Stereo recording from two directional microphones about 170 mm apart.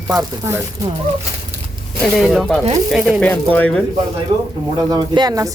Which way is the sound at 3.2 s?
10° left (ahead or behind).